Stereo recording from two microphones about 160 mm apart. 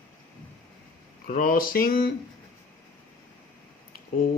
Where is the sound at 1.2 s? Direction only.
55° left (ahead or behind).